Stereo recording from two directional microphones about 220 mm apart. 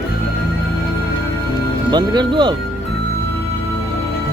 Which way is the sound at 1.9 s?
20° right (ahead or behind).